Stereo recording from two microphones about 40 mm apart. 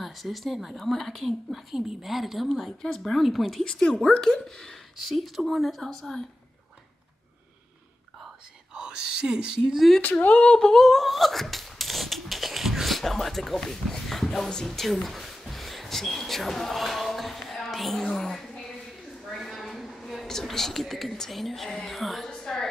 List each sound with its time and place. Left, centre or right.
0.0 s a woman's voice: centre
3.6 s speech: left
4.9 s a woman's voice: centre
5.8 s speech: centre
8.7 s speech: centre
10.4 s speech: left
10.7 s beatboxing: centre
13.0 s speech: centre
13.7 s a sound: centre
21.3 s a woman's voice: centre
22.4 s a sound: centre